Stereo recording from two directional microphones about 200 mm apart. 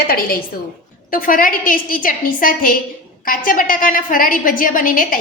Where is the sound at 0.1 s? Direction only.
45° left (ahead or behind).